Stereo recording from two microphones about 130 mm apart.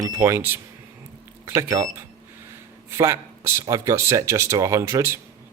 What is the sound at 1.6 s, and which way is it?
Speech, 25° right (ahead or behind).